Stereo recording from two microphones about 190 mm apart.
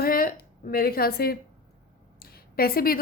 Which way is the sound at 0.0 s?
50° left (ahead or behind).